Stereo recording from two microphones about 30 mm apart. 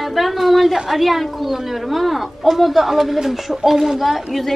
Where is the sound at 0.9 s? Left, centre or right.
Centre.